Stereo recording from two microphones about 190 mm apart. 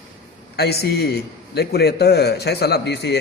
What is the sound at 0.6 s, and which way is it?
A man's voice, 55° left (ahead or behind).